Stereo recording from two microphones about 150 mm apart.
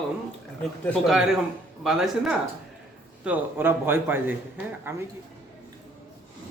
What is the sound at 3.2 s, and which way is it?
A man's voice, 10° right (ahead or behind).